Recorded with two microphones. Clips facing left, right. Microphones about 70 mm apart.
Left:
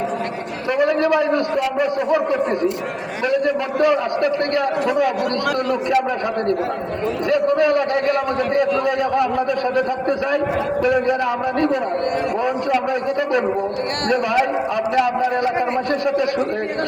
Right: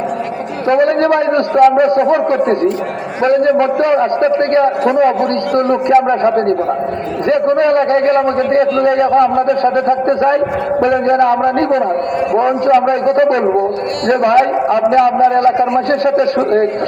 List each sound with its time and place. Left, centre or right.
0.7 s a man's voice: right